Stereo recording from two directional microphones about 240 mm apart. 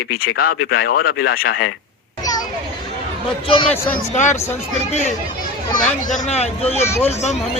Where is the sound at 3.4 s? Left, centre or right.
Left.